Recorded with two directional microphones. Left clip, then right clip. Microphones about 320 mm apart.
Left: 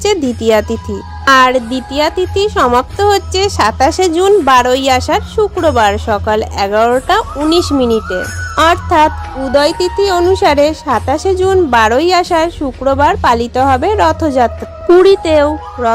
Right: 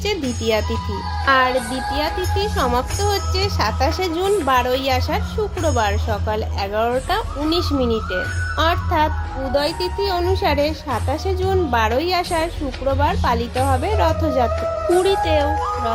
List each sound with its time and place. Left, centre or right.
0.0 s a woman's voice: left